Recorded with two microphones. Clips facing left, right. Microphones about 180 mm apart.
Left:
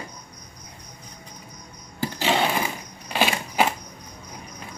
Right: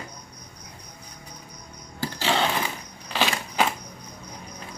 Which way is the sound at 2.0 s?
15° left (ahead or behind).